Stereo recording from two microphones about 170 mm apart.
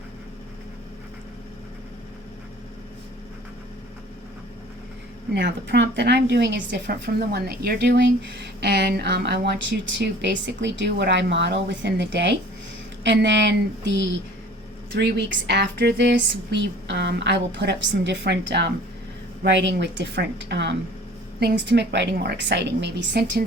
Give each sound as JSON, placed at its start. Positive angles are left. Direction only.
{"t": 5.3, "sound": "a woman's voice", "side_deg": -85}
{"t": 6.7, "sound": "a woman's voice", "side_deg": -75}